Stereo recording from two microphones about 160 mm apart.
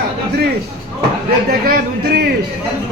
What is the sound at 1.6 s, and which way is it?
Speech, 70° right (ahead or behind).